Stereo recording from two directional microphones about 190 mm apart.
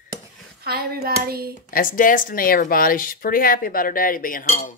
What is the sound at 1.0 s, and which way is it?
Hands, 55° right (ahead or behind).